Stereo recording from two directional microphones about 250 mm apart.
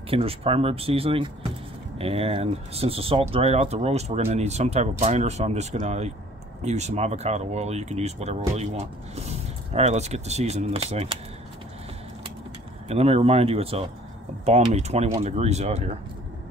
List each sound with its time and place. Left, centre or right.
0.1 s speech: right
12.8 s speech: right